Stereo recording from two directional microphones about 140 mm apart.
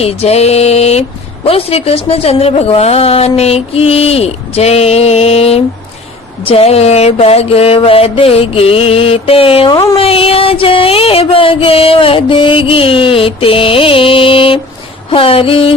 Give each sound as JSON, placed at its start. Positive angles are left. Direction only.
{"t": 0.0, "sound": "a woman's voice", "side_deg": 45}
{"t": 10.0, "sound": "music", "side_deg": 40}